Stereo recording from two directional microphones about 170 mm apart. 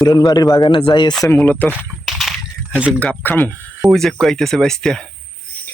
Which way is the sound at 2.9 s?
10° left (ahead or behind).